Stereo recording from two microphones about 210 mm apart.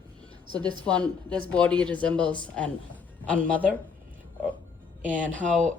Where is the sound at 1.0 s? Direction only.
5° left (ahead or behind).